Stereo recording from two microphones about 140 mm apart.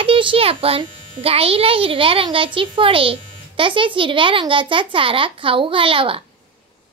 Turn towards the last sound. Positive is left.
turn(degrees=-40)  # may be behind; listen again after turning